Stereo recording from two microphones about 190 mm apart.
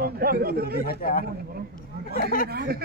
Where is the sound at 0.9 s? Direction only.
50° left (ahead or behind).